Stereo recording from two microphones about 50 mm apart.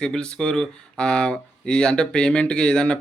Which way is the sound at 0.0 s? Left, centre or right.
Centre.